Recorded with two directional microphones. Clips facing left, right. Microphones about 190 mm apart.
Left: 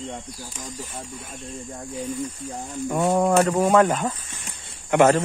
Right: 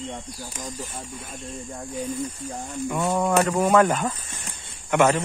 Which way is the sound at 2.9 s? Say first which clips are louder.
Left 3 dB; 35° left (ahead or behind).